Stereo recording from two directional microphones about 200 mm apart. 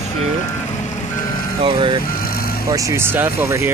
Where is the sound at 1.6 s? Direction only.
25° right (ahead or behind).